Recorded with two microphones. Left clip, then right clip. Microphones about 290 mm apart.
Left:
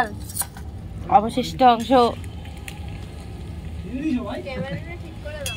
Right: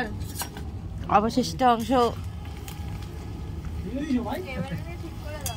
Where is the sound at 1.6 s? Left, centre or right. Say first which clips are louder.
Left 6 dB; right.